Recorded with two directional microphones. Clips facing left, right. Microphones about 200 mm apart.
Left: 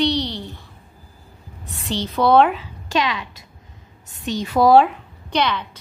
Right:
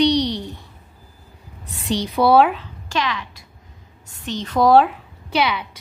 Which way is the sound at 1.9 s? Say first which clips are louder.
Right 1 dB; 15° right (ahead or behind).